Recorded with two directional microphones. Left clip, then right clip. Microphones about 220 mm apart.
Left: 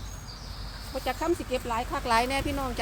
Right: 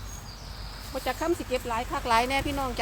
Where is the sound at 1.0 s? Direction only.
20° right (ahead or behind).